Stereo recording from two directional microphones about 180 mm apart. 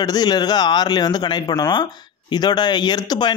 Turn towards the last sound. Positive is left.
turn(degrees=25)  # may be behind; listen again after turning